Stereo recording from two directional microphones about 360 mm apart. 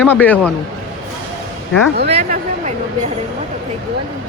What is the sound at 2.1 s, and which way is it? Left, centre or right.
Speech, centre.